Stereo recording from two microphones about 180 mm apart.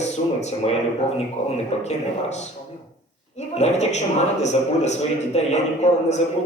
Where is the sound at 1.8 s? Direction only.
40° left (ahead or behind).